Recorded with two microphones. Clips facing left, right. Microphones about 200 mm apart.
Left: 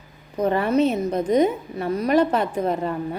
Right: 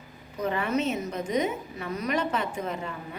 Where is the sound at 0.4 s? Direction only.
35° left (ahead or behind).